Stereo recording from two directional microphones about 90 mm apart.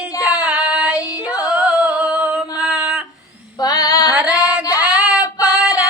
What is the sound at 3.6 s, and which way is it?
Female singing, 45° left (ahead or behind).